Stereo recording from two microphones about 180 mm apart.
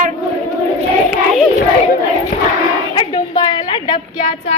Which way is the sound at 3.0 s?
25° left (ahead or behind).